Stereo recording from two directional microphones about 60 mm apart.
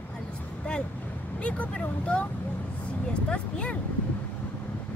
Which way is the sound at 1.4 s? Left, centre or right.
Left.